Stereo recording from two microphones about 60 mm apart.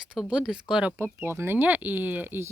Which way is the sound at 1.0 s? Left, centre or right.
Right.